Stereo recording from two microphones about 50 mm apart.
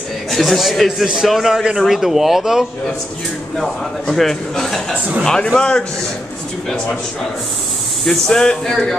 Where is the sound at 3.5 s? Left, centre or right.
Centre.